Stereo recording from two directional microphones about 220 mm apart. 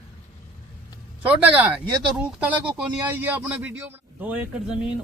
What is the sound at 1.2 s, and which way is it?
A man's voice, 5° right (ahead or behind).